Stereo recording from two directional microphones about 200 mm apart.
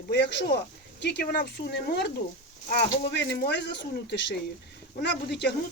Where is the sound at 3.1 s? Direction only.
60° left (ahead or behind).